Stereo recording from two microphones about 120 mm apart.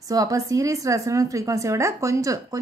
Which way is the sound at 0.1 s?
30° right (ahead or behind).